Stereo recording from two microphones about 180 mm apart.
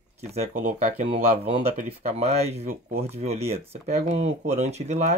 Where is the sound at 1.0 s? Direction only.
30° right (ahead or behind).